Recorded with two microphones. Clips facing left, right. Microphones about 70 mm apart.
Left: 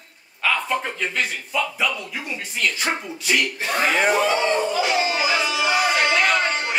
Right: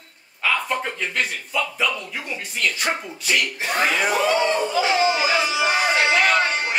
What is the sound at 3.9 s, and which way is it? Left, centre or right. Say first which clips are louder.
Speech: left 2 dB; left.